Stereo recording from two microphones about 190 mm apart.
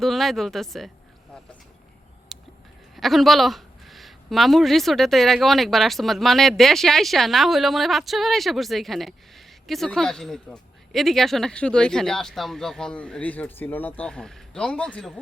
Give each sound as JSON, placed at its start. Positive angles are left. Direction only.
{"t": 0.0, "sound": "speech", "side_deg": 0}
{"t": 2.3, "sound": "a sound", "side_deg": 0}
{"t": 2.9, "sound": "speech", "side_deg": 0}